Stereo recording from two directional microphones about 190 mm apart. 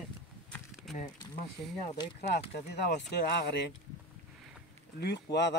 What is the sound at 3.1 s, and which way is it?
Speech, 65° left (ahead or behind).